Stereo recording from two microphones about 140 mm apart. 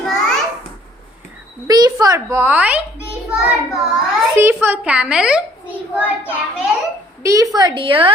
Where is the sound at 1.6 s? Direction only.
30° right (ahead or behind); by 2.8 s 10° right (ahead or behind).